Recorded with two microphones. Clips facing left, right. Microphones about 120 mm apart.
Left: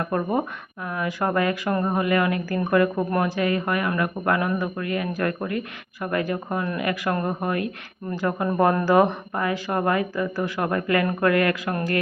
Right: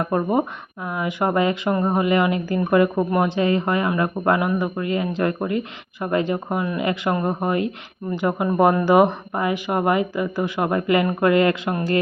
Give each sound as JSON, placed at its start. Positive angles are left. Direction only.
{"t": 0.0, "sound": "speech", "side_deg": -20}